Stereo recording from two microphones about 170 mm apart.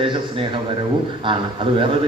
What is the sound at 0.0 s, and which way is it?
Speech, 30° right (ahead or behind).